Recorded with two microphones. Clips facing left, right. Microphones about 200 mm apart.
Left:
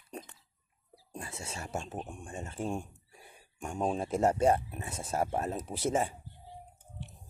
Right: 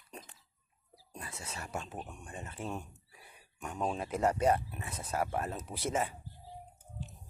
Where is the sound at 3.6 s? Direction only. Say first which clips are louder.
Left 3 dB; 30° left (ahead or behind).